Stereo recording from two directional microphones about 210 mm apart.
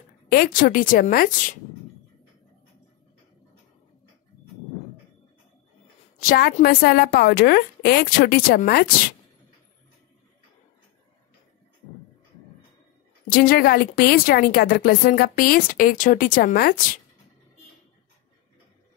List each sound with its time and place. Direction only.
0.3 s a woman's voice: 45° left (ahead or behind)
6.2 s a woman's voice: 50° left (ahead or behind)
13.3 s a woman's voice: 45° left (ahead or behind)